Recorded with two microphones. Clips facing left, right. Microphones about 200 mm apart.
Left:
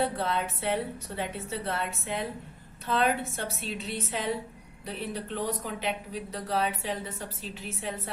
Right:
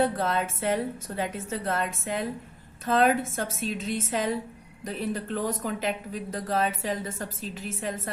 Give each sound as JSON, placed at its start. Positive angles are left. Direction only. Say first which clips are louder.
{"t": 0.0, "sound": "a woman's voice", "louder": "right 3 dB", "side_deg": -45}